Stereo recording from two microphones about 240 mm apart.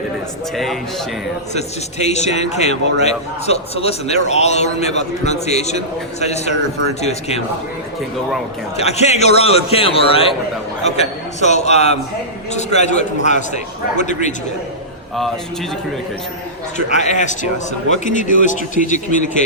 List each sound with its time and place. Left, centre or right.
0.5 s a man's voice: centre
1.5 s a man's voice: left
8.7 s a man's voice: left
16.7 s a man's voice: left